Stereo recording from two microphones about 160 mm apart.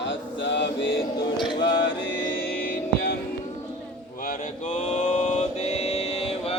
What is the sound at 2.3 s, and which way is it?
Music, 65° left (ahead or behind).